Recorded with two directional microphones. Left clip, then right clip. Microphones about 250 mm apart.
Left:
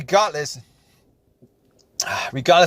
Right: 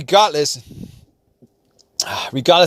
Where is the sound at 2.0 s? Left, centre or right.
Right.